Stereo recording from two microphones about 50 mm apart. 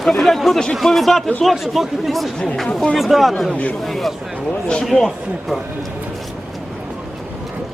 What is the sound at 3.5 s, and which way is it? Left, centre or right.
Speech, left.